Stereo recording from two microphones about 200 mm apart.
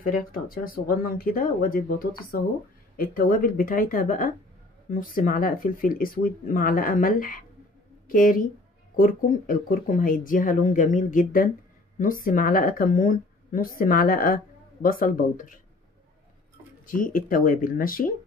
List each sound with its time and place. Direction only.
0.0 s speech: 45° left (ahead or behind)
16.8 s speech: 45° left (ahead or behind)